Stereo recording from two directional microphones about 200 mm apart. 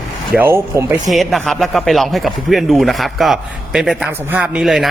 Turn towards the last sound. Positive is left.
turn(degrees=0)  # may be behind; listen again after turning